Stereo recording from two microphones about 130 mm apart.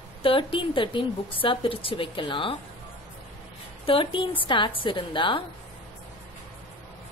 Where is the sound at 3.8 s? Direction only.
40° left (ahead or behind).